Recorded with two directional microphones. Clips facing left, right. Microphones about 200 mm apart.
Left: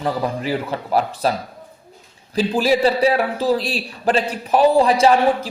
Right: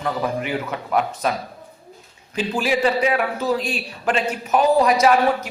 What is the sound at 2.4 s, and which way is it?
A man's voice, 35° left (ahead or behind).